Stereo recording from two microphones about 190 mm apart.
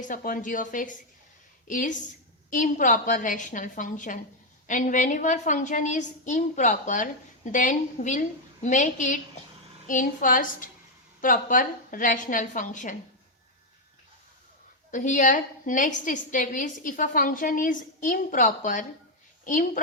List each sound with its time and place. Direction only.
0.1 s a woman's voice: 45° left (ahead or behind)
14.8 s a woman's voice: 40° left (ahead or behind)